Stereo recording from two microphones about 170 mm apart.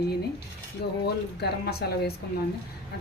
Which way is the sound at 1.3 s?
70° left (ahead or behind).